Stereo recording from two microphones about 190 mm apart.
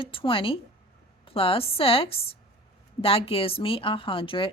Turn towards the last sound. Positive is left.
turn(degrees=25)  # may be behind; listen again after turning